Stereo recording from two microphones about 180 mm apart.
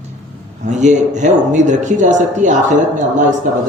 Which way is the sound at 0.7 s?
40° right (ahead or behind).